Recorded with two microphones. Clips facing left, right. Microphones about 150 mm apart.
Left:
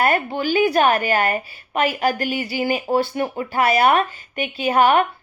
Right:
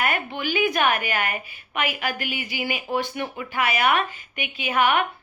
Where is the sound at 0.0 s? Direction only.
35° left (ahead or behind).